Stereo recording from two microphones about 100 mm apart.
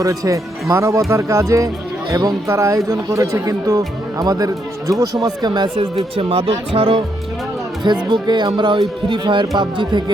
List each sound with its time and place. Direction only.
0.0 s speech: 35° right (ahead or behind)
6.0 s speech: 65° right (ahead or behind)
8.1 s speech: 50° right (ahead or behind)